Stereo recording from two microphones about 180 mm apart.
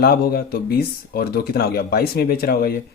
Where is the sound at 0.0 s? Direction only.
60° left (ahead or behind).